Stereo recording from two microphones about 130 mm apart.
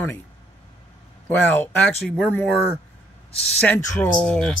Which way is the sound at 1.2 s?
15° left (ahead or behind).